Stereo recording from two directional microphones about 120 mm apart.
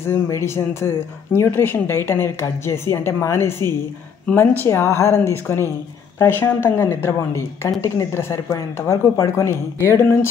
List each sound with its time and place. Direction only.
0.1 s speech: 20° left (ahead or behind)